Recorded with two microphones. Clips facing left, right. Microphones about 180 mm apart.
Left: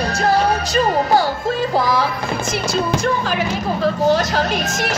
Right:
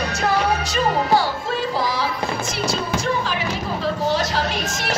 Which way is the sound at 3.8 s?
45° left (ahead or behind).